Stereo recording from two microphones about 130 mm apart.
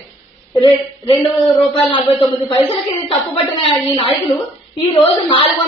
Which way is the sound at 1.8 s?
40° left (ahead or behind).